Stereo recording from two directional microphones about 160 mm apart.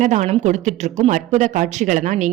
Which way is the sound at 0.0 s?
50° right (ahead or behind).